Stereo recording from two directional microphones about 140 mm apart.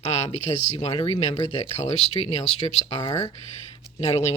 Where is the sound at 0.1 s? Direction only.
50° left (ahead or behind).